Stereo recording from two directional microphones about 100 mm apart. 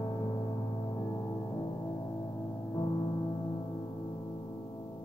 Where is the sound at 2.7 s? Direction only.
45° left (ahead or behind).